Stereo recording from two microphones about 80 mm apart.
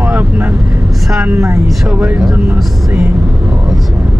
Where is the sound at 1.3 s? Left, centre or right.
Right.